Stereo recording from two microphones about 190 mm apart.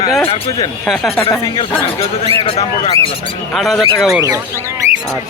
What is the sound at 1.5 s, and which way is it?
Speech, 25° left (ahead or behind).